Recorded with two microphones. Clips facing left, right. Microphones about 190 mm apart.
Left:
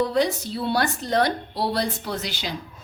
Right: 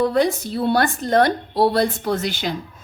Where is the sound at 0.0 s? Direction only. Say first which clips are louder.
Right 4 dB; 50° right (ahead or behind).